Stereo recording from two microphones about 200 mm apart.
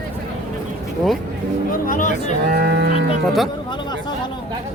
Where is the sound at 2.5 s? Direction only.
50° right (ahead or behind).